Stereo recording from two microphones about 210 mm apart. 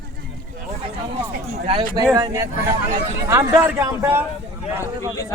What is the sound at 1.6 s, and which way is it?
Speech, 30° right (ahead or behind).